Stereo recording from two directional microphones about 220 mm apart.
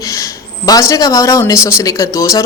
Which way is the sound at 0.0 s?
15° left (ahead or behind).